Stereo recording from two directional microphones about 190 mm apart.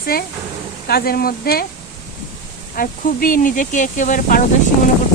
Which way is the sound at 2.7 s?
45° left (ahead or behind).